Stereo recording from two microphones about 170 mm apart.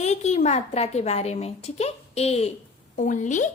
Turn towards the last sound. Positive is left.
turn(degrees=45)  # may be behind; listen again after turning